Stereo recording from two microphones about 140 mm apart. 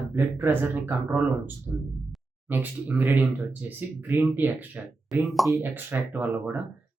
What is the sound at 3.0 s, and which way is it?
Speech, 10° right (ahead or behind).